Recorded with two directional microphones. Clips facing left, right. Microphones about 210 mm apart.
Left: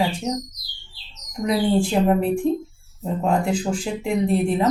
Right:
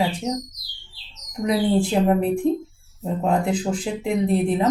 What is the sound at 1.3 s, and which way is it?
Speech, 20° right (ahead or behind).